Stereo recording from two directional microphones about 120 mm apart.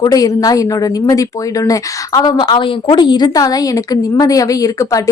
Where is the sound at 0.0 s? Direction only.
30° left (ahead or behind).